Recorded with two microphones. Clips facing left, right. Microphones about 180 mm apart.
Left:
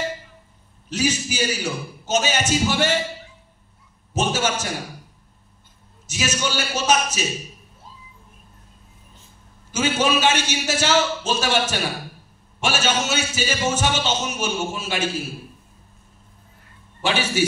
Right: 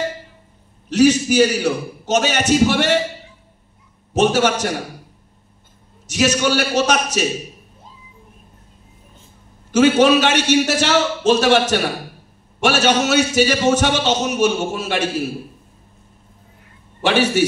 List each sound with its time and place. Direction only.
0.8 s a man's voice: 65° right (ahead or behind)
4.2 s a man's voice: 65° right (ahead or behind)
6.0 s a man's voice: 65° right (ahead or behind)
9.7 s a man's voice: 65° right (ahead or behind)
12.6 s a man's voice: 70° right (ahead or behind)
17.0 s a man's voice: 65° right (ahead or behind)